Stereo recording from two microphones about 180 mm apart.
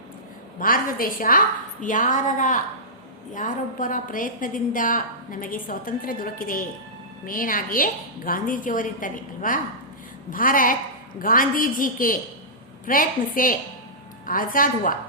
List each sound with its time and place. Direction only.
0.6 s a woman's voice: 50° left (ahead or behind)